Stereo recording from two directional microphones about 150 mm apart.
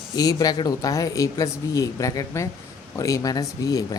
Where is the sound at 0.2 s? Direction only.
25° left (ahead or behind).